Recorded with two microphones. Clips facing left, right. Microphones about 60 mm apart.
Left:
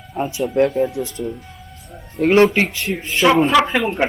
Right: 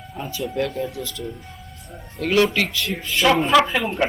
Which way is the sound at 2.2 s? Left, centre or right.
Left.